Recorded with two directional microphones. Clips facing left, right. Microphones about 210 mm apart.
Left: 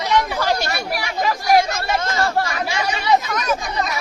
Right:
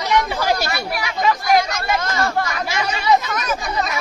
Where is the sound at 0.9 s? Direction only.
35° left (ahead or behind).